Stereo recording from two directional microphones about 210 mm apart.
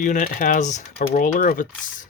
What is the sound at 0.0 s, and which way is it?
Speech, 35° left (ahead or behind).